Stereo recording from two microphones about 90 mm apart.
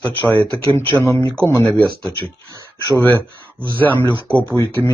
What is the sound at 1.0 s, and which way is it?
Speech, 35° left (ahead or behind).